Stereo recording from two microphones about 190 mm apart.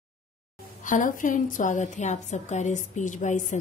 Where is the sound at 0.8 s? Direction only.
45° left (ahead or behind).